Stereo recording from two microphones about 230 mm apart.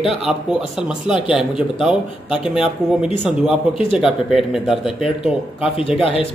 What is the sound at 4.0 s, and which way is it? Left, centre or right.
Speech, centre.